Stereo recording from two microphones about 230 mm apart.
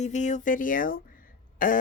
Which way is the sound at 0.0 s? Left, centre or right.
Left.